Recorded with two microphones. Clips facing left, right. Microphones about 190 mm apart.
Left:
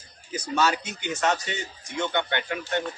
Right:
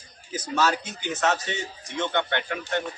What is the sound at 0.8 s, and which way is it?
Speech, 15° left (ahead or behind).